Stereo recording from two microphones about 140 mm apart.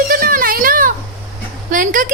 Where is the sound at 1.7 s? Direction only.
70° right (ahead or behind).